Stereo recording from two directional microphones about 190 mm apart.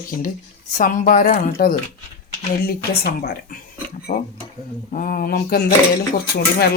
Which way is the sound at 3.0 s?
55° left (ahead or behind).